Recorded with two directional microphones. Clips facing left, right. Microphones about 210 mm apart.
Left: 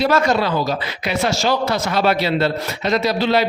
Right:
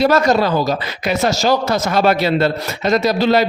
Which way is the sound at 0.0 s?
40° right (ahead or behind).